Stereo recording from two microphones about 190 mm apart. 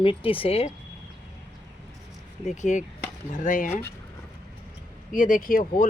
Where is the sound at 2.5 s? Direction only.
40° left (ahead or behind).